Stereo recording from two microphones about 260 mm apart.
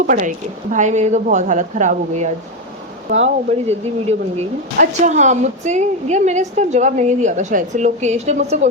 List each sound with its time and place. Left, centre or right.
0.0 s speech: right